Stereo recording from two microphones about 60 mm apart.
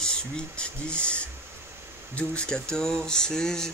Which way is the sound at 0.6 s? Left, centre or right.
Centre.